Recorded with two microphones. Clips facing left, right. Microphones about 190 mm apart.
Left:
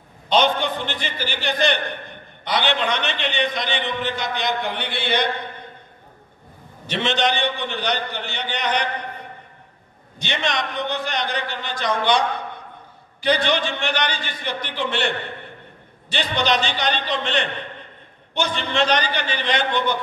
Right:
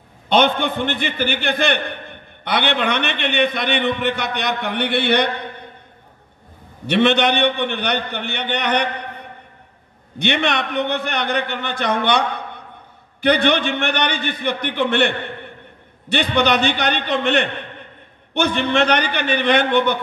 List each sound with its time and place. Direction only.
0.3 s a man's voice: 55° right (ahead or behind)
6.9 s a man's voice: 60° right (ahead or behind)
10.1 s a man's voice: 60° right (ahead or behind)